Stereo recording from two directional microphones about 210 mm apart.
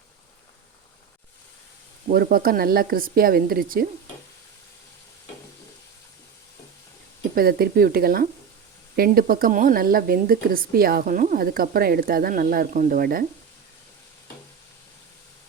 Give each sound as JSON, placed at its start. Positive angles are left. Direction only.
{"t": 2.0, "sound": "speech", "side_deg": -45}
{"t": 7.3, "sound": "speech", "side_deg": -45}